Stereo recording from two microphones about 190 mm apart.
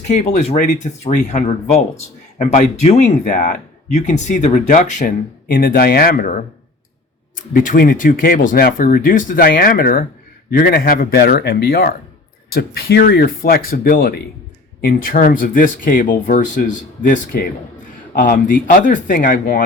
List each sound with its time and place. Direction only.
0.1 s speech: 35° left (ahead or behind)
7.3 s speech: 45° left (ahead or behind)